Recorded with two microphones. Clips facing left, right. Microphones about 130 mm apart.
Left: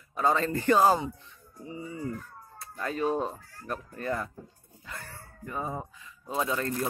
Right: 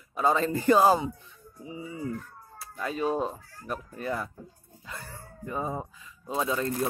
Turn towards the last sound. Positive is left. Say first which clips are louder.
# right 1 dB
turn(degrees=-15)  # may be behind; listen again after turning